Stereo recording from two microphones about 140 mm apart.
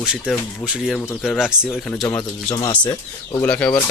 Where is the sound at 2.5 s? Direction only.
30° left (ahead or behind).